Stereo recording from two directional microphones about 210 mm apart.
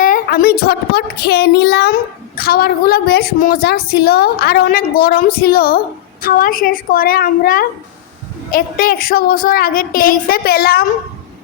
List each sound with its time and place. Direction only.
0.0 s a woman's voice: 40° left (ahead or behind)